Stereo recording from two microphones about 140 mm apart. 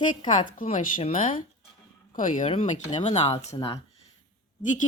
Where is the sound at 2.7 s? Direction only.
55° left (ahead or behind).